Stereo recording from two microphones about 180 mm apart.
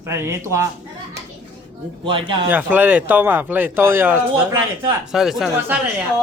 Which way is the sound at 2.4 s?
10° right (ahead or behind).